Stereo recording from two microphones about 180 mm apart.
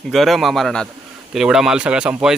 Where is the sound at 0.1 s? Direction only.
Centre (ahead or behind).